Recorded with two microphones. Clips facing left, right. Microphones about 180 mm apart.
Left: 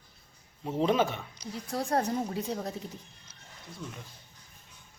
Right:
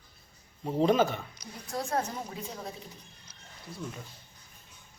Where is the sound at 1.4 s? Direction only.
30° left (ahead or behind).